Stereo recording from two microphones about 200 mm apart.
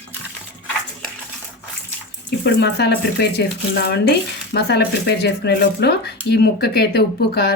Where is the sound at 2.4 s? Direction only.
60° left (ahead or behind).